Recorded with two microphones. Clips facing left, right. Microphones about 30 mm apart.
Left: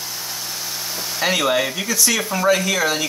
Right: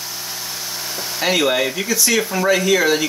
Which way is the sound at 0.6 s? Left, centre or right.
Centre.